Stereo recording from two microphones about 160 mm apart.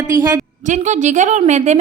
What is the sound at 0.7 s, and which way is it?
A woman's voice, 50° right (ahead or behind).